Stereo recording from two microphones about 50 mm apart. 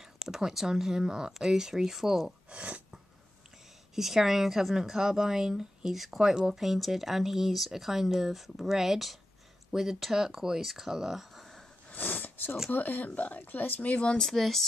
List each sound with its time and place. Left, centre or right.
0.0 s speech: centre
2.5 s a sound: right
3.9 s speech: centre
11.9 s a sound: left
12.7 s speech: left
14.2 s speech: centre